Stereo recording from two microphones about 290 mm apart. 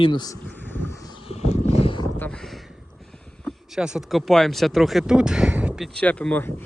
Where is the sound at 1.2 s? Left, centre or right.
Left.